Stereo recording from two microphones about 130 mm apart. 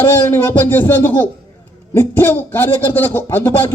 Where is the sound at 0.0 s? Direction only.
20° left (ahead or behind).